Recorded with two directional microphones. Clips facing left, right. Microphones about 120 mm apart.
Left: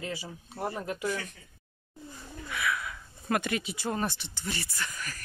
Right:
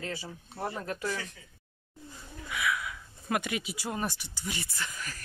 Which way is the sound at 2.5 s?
10° right (ahead or behind).